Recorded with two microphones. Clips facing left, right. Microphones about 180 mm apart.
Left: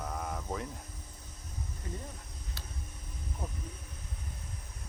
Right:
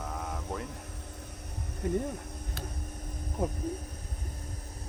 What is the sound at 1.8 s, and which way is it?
Speech, 65° right (ahead or behind).